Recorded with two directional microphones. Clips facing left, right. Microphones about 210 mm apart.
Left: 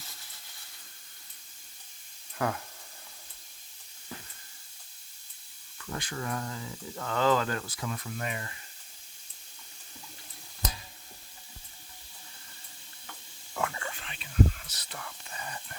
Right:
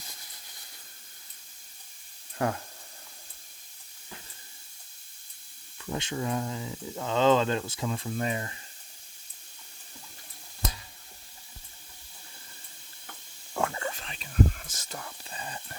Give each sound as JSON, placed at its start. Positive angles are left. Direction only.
{"t": 5.8, "sound": "speech", "side_deg": -25}
{"t": 13.6, "sound": "whispering", "side_deg": -35}